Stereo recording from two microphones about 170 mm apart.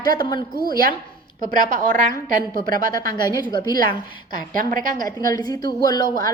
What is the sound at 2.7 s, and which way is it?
Speech, 55° right (ahead or behind).